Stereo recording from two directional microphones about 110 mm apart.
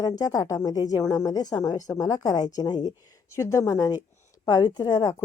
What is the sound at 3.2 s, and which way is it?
A woman's voice, 25° left (ahead or behind).